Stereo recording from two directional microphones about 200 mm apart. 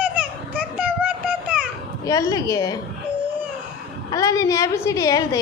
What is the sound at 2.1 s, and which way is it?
Speech, 15° left (ahead or behind).